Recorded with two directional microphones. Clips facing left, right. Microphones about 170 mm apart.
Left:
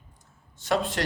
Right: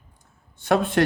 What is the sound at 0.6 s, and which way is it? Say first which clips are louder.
Speech: right 6 dB; 55° right (ahead or behind).